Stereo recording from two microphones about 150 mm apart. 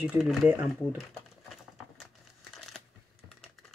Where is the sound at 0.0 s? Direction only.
Centre (ahead or behind).